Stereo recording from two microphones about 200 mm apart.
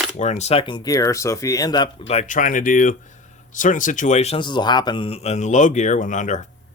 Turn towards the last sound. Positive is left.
turn(degrees=35)  # may be behind; listen again after turning